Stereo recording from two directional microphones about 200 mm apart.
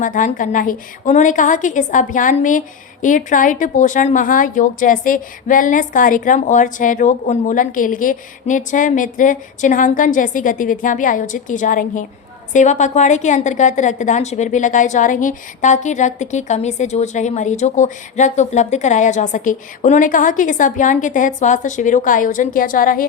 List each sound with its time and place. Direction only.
0.0 s a woman's voice: 40° left (ahead or behind)